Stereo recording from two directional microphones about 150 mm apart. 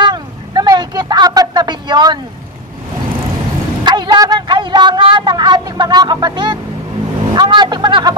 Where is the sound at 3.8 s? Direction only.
30° right (ahead or behind).